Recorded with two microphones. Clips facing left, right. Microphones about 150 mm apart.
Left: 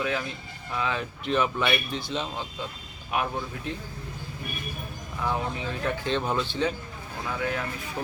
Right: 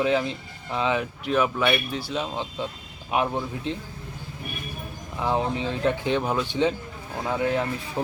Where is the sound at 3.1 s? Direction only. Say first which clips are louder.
Right 4 dB; 20° right (ahead or behind).